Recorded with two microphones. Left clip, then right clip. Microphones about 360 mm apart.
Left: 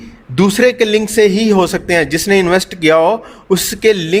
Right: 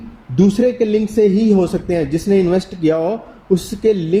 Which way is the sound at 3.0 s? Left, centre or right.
Left.